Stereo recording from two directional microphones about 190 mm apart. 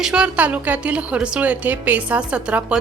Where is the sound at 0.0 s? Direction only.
5° right (ahead or behind).